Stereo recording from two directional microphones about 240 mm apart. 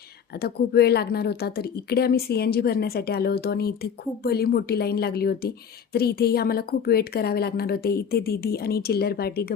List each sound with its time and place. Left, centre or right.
0.4 s a woman's voice: left